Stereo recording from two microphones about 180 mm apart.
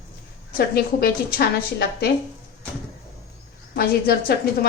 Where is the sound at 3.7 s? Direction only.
60° left (ahead or behind).